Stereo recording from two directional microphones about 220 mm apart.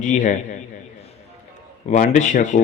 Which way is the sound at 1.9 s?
35° left (ahead or behind).